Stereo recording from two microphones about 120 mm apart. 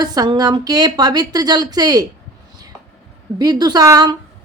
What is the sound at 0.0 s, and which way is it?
A woman's voice, 35° right (ahead or behind).